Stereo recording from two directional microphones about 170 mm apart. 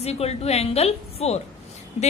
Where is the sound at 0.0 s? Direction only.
40° left (ahead or behind).